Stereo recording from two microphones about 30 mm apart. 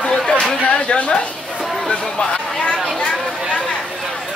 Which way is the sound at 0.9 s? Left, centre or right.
Left.